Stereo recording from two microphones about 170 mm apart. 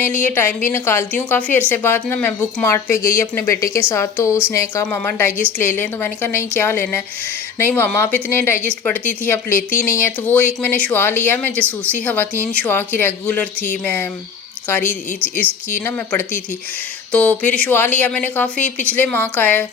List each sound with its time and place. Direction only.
0.0 s speech: 10° left (ahead or behind)